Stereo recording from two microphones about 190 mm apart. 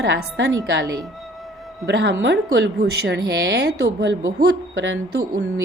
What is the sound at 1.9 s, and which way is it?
Speech, 70° right (ahead or behind).